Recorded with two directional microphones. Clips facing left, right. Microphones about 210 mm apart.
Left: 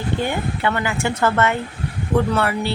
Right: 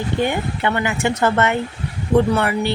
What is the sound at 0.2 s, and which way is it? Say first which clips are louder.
Speech: right 2 dB; 20° right (ahead or behind).